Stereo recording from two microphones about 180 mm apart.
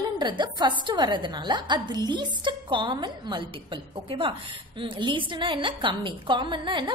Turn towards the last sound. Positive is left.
turn(degrees=-25)  # may be behind; listen again after turning